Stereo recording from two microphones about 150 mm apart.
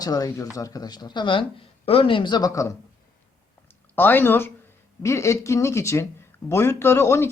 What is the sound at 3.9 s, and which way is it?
Speech, 15° left (ahead or behind).